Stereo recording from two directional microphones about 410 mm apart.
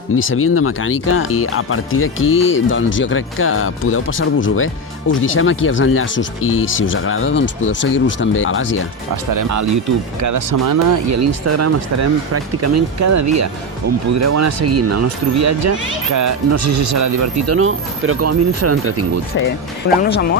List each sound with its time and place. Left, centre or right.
0.2 s speech: left
9.3 s speech: right
20.0 s speech: left